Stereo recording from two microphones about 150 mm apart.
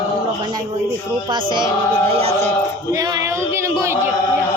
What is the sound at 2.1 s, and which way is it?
Music, 45° right (ahead or behind).